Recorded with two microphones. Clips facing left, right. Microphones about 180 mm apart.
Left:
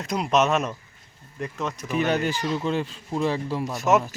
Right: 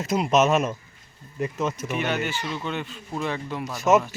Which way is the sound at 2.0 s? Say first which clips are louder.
Left 5 dB; 35° left (ahead or behind).